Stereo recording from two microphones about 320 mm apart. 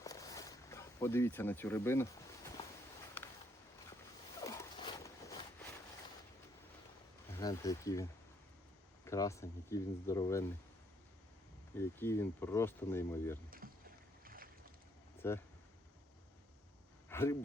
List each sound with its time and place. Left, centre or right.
0.0 s a sound: centre
4.4 s dog: centre
7.3 s speech: centre
9.0 s speech: centre
11.8 s speech: centre
14.3 s boat: right
15.2 s speech: centre
17.1 s a sound: centre